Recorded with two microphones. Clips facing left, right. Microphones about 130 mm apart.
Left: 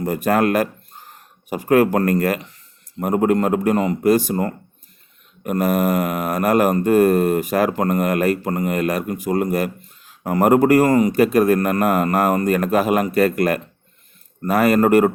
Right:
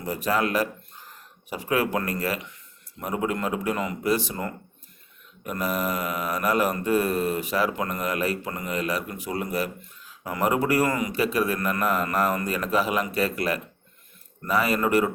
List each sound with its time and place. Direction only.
0.0 s a man's voice: 50° left (ahead or behind)